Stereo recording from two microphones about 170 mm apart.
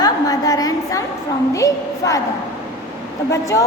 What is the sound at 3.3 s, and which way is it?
Speech, 20° left (ahead or behind).